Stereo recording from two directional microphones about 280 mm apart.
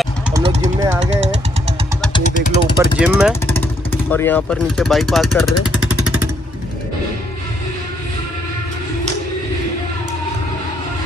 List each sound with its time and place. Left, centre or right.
0.3 s vehicle: right
2.1 s vehicle: left
2.8 s speech: centre
3.4 s speech: centre